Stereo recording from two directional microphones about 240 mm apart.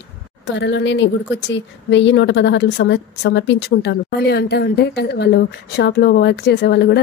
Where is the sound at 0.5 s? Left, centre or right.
Left.